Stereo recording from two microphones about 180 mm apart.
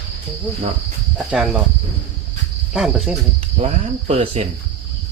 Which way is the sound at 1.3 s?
5° right (ahead or behind).